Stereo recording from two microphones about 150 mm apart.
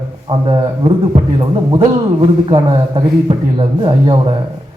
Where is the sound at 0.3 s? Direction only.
35° right (ahead or behind).